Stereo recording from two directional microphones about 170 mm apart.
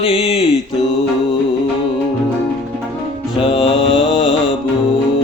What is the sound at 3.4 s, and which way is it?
Mantra, 30° left (ahead or behind).